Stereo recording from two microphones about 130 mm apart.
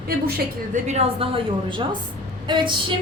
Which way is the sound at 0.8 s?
55° right (ahead or behind).